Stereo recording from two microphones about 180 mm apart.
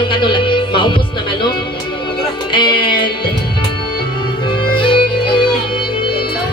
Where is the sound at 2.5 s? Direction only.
25° left (ahead or behind).